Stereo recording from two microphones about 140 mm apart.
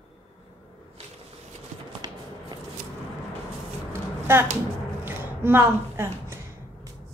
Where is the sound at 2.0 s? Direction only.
30° right (ahead or behind).